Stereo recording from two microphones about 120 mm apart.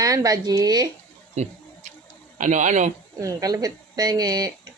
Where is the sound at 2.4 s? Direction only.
90° right.